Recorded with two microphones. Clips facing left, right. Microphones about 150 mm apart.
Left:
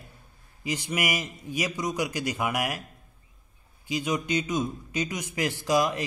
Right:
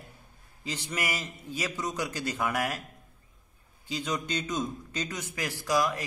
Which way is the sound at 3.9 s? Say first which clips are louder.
Left 5 dB; 10° left (ahead or behind).